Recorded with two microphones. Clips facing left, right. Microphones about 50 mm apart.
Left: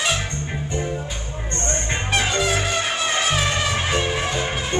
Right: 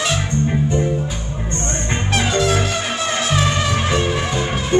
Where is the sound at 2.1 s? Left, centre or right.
Centre.